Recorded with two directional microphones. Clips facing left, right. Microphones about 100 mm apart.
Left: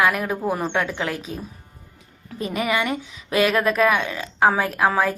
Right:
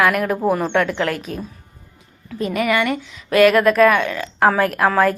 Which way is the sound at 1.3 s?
65° right (ahead or behind).